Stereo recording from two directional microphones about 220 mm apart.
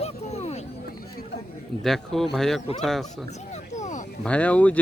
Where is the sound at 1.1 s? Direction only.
45° left (ahead or behind).